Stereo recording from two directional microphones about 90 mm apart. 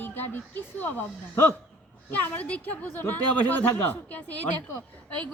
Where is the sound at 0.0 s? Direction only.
20° left (ahead or behind).